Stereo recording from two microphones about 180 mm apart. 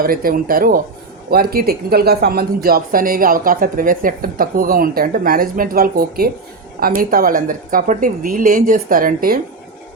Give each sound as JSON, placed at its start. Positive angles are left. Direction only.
{"t": 0.0, "sound": "speech", "side_deg": -55}